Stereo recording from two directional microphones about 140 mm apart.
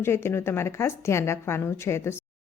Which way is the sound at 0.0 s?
20° left (ahead or behind).